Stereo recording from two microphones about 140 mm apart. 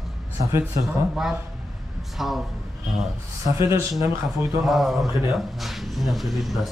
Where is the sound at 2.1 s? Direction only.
Centre (ahead or behind).